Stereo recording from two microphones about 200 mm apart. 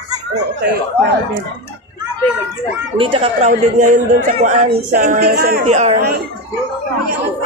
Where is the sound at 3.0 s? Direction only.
25° right (ahead or behind).